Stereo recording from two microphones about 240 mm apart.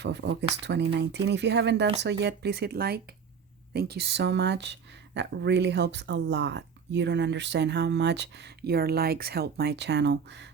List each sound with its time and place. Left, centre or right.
0.0 s speech: right